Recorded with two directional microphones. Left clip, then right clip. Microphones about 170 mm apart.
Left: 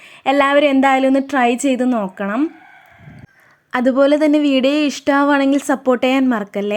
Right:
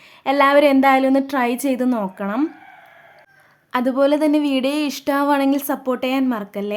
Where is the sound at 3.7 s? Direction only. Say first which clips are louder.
Left 4 dB; 25° left (ahead or behind).